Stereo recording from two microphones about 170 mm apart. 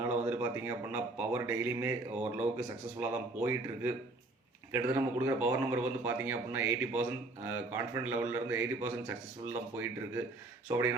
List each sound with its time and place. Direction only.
0.1 s speech: 10° right (ahead or behind)